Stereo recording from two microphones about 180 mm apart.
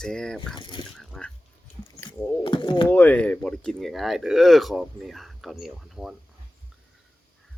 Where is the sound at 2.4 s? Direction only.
25° left (ahead or behind).